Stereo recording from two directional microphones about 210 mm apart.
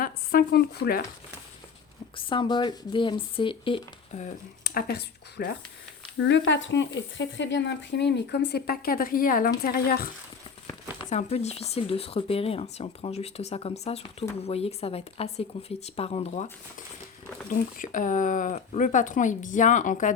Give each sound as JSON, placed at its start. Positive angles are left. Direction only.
{"t": 0.0, "sound": "speech", "side_deg": 45}
{"t": 2.1, "sound": "speech", "side_deg": 25}
{"t": 4.6, "sound": "speech", "side_deg": 50}
{"t": 6.1, "sound": "speech", "side_deg": 60}
{"t": 11.1, "sound": "speech", "side_deg": 30}